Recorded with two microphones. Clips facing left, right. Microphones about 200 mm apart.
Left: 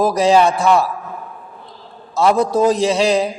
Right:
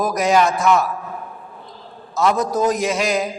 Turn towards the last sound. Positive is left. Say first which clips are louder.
# left 5 dB
turn(degrees=30)  # may be behind; listen again after turning